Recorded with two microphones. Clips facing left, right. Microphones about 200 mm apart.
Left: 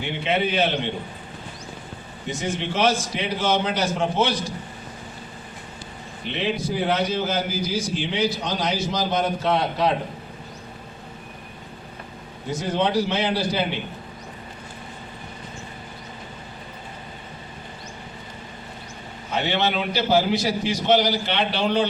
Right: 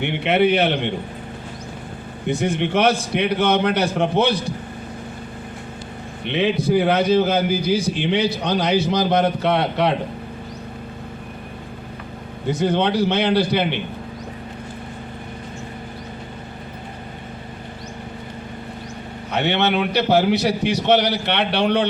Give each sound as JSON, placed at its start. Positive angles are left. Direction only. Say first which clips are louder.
{"t": 0.0, "sound": "a man's voice", "louder": "right 6 dB", "side_deg": -60}
{"t": 2.2, "sound": "a man's voice", "louder": "right 6 dB", "side_deg": -60}
{"t": 6.3, "sound": "a man's voice", "louder": "right 7 dB", "side_deg": -65}
{"t": 12.5, "sound": "a man's voice", "louder": "right 5 dB", "side_deg": -60}
{"t": 19.3, "sound": "a man's voice", "louder": "right 4 dB", "side_deg": -65}